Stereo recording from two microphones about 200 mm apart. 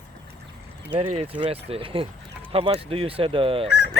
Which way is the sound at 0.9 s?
30° right (ahead or behind).